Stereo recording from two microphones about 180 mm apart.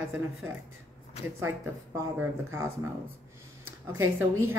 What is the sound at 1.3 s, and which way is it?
A woman's voice, 15° right (ahead or behind).